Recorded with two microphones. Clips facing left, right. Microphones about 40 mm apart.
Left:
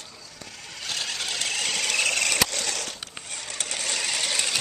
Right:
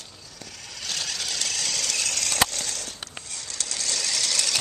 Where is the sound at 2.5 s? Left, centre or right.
Left.